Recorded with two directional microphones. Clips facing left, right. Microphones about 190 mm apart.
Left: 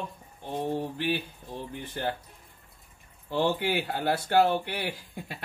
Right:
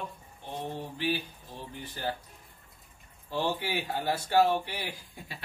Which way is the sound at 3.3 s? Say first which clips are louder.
Left 4 dB; 60° left (ahead or behind).